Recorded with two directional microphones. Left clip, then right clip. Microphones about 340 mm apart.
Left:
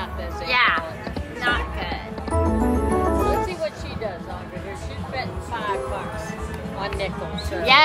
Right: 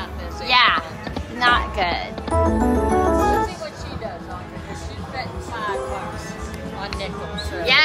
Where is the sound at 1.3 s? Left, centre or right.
Centre.